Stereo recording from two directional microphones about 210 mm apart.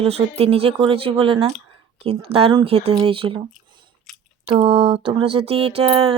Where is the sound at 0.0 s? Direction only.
30° right (ahead or behind).